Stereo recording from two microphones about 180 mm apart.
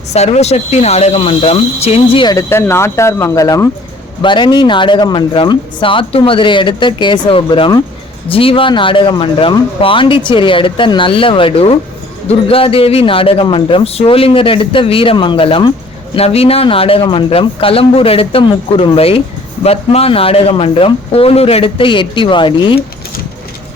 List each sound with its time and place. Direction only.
0.1 s a man's voice: 35° left (ahead or behind)
2.2 s a man's voice: 15° left (ahead or behind)